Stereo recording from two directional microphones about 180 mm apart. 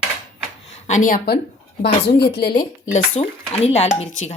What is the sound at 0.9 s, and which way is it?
A woman's voice, 45° left (ahead or behind).